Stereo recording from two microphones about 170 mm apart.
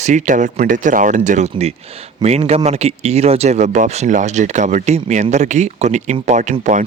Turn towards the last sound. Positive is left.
turn(degrees=-45)  # may be behind; listen again after turning